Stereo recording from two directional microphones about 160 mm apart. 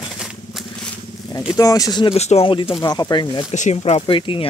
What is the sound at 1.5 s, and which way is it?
Speech, 20° left (ahead or behind).